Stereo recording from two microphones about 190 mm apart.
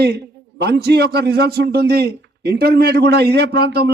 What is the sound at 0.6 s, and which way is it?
A man's voice, 55° right (ahead or behind).